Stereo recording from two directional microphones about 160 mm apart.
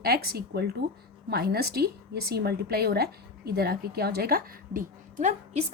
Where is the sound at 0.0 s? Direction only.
80° right.